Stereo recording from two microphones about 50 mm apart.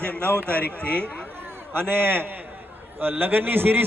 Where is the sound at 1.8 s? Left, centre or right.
Right.